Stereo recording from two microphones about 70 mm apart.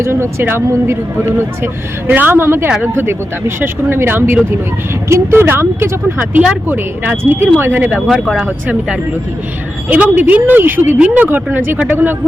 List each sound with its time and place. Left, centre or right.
0.0 s a woman's voice: right
8.1 s speech: centre
9.9 s a woman's voice: right
10.9 s a woman's voice: centre